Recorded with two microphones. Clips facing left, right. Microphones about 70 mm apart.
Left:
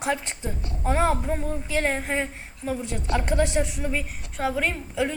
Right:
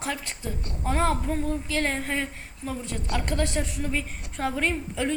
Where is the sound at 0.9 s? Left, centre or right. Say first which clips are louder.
Left 2 dB; centre.